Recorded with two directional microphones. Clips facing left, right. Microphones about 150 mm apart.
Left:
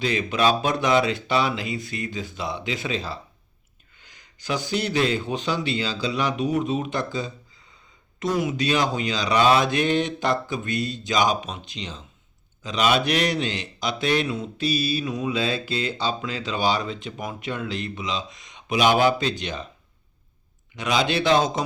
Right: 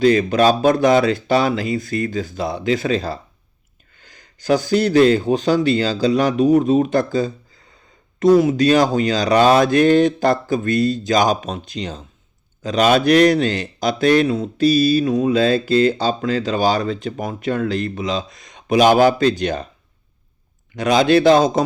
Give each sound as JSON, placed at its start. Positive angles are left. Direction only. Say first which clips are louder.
{"t": 0.0, "sound": "speech", "louder": "right 8 dB", "side_deg": -40}
{"t": 4.4, "sound": "speech", "louder": "right 10 dB", "side_deg": -40}
{"t": 20.7, "sound": "speech", "louder": "right 9 dB", "side_deg": -40}